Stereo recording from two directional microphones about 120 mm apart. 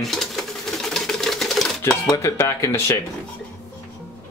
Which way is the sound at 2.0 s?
25° left (ahead or behind).